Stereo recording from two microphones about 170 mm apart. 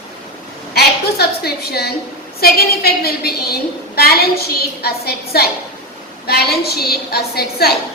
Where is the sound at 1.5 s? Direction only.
70° left (ahead or behind).